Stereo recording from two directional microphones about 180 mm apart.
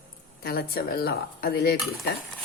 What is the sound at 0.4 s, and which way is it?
A man's voice, 55° left (ahead or behind).